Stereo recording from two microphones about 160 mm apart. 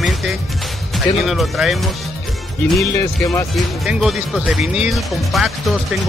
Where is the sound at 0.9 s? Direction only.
Centre (ahead or behind).